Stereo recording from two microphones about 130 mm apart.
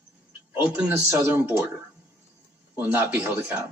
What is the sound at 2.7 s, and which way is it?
Speech, 15° right (ahead or behind).